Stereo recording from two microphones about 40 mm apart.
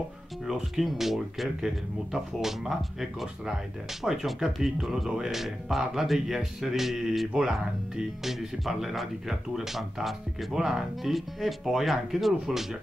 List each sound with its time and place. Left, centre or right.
0.5 s speech: centre
8.2 s speech: centre